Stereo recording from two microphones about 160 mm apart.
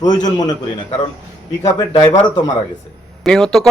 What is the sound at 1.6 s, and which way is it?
Speech, 40° left (ahead or behind).